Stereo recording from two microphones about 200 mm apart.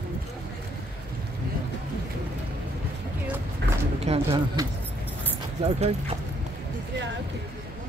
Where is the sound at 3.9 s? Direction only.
30° right (ahead or behind).